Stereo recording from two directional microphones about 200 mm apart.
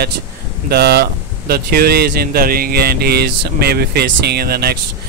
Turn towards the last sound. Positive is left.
turn(degrees=-50)  # may be behind; listen again after turning